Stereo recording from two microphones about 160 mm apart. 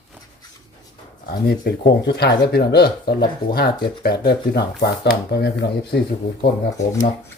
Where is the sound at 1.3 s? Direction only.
75° left (ahead or behind).